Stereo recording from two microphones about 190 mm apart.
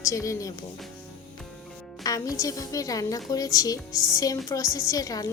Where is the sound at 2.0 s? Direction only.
20° left (ahead or behind).